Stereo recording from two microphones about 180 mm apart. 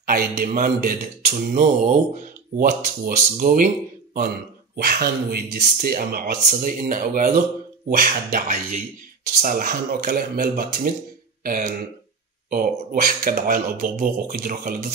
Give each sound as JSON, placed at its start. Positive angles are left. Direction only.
{"t": 0.0, "sound": "a man's voice", "side_deg": -55}
{"t": 7.9, "sound": "speech", "side_deg": -55}